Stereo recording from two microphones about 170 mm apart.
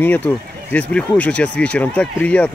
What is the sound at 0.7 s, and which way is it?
Speech, 10° left (ahead or behind).